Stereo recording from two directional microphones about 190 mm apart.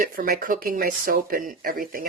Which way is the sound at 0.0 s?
45° right (ahead or behind).